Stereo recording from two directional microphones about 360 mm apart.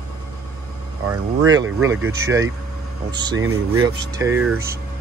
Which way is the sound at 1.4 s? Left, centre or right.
Centre.